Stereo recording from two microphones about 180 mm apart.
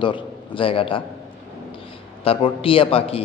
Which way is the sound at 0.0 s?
30° left (ahead or behind).